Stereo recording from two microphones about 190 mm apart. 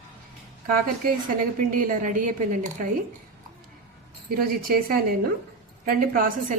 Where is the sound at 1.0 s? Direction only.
50° right (ahead or behind).